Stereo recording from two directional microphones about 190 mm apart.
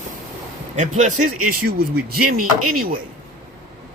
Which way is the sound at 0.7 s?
40° right (ahead or behind).